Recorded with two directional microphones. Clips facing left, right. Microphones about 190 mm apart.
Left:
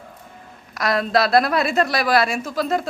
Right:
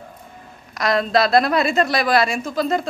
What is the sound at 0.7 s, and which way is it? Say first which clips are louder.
A woman's voice: right 1 dB; centre (ahead or behind).